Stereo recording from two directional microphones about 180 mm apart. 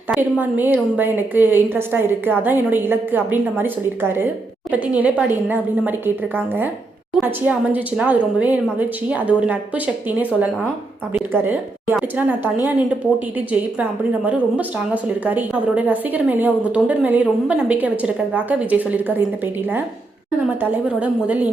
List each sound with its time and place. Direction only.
0.1 s a woman's voice: 10° right (ahead or behind)
4.7 s a woman's voice: 10° right (ahead or behind)
7.2 s a woman's voice: 10° right (ahead or behind)
14.3 s a woman's voice: 5° right (ahead or behind)
20.6 s a woman's voice: 10° right (ahead or behind)